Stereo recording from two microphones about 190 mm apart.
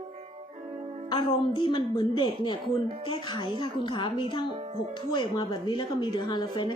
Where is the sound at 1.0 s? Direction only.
25° left (ahead or behind).